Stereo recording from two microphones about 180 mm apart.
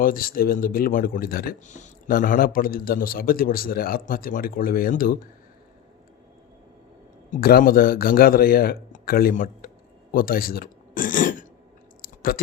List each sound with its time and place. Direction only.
0.0 s speech: 50° left (ahead or behind)
7.3 s a man's voice: 50° left (ahead or behind)
10.1 s a sound: 55° left (ahead or behind)